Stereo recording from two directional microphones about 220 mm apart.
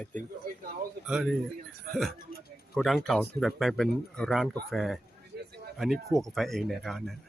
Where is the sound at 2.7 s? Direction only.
Centre (ahead or behind).